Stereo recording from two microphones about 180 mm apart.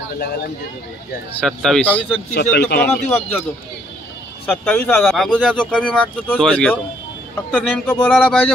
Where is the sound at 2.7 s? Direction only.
65° left (ahead or behind).